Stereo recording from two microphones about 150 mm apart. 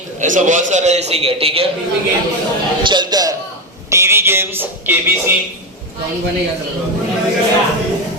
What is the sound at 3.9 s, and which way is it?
Music, 20° right (ahead or behind).